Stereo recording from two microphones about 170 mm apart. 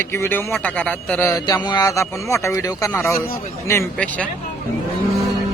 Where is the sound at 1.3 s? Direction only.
20° left (ahead or behind).